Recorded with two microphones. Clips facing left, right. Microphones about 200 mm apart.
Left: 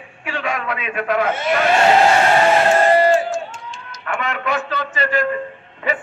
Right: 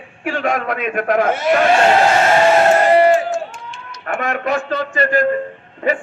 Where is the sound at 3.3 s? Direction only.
60° right (ahead or behind).